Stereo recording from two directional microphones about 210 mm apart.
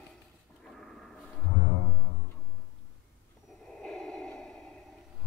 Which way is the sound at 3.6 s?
5° left (ahead or behind).